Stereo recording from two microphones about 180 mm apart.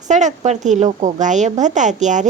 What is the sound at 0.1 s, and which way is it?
A woman's voice, 40° right (ahead or behind).